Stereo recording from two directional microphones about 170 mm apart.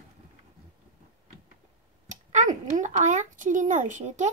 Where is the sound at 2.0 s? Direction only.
45° right (ahead or behind).